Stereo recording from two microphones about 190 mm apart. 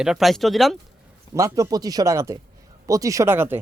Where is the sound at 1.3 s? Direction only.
15° right (ahead or behind).